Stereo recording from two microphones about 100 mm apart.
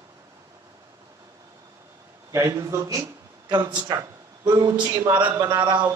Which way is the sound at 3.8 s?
45° right (ahead or behind).